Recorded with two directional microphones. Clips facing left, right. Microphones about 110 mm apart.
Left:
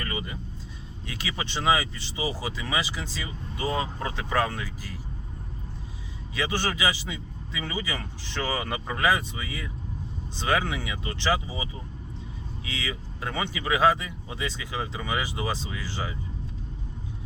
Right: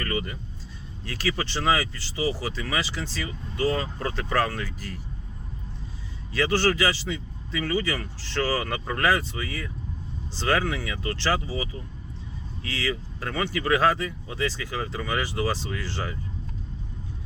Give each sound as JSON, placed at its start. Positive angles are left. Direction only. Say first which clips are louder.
{"t": 0.0, "sound": "vehicle", "louder": "right 4 dB", "side_deg": 15}
{"t": 1.0, "sound": "speech", "louder": "right 5 dB", "side_deg": 20}
{"t": 6.3, "sound": "speech", "louder": "right 6 dB", "side_deg": 15}